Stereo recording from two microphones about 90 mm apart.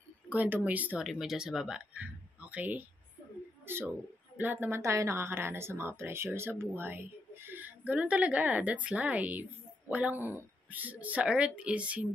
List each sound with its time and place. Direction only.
0.3 s a woman's voice: 20° right (ahead or behind)
0.9 s a woman's voice: 5° right (ahead or behind)